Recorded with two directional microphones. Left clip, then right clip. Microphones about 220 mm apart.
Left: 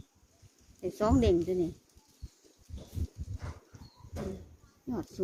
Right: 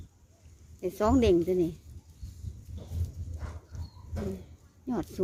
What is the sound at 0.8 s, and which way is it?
Speech, 15° right (ahead or behind).